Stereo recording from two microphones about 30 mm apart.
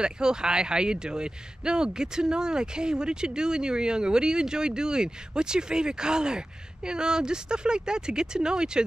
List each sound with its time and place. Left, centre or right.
0.0 s speech: right